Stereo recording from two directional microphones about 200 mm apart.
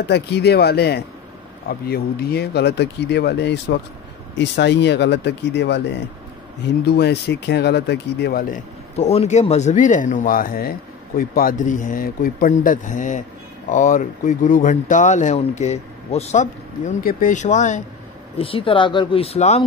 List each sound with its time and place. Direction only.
0.0 s speech: 55° left (ahead or behind)
6.8 s speech: 55° left (ahead or behind)
8.9 s speech: 30° left (ahead or behind)